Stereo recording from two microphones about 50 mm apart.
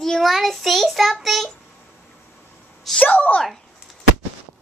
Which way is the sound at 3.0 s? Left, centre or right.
Left.